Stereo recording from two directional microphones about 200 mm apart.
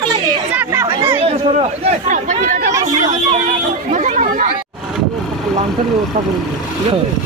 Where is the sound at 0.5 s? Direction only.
15° right (ahead or behind).